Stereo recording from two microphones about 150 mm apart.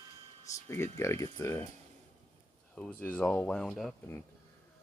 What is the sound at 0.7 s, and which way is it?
Speech, 20° left (ahead or behind).